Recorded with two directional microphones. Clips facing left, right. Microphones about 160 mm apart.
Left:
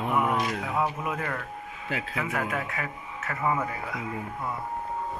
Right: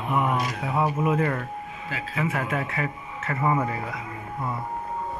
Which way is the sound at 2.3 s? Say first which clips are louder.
Right 2 dB; centre (ahead or behind).